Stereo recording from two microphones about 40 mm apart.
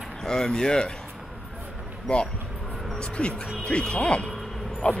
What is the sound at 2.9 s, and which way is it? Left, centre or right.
Speech, left.